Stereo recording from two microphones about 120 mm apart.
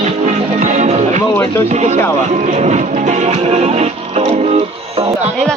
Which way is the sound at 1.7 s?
70° right (ahead or behind).